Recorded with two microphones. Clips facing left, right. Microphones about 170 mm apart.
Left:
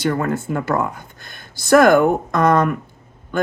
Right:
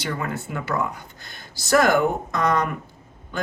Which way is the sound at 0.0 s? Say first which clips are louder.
Left 8 dB; 50° left (ahead or behind).